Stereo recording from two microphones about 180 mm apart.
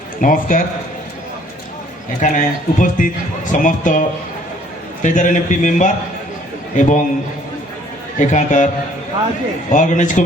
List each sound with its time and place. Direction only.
0.2 s speech: 50° left (ahead or behind)
2.2 s speech: 45° left (ahead or behind)
5.0 s speech: 45° left (ahead or behind)
8.2 s speech: 40° left (ahead or behind)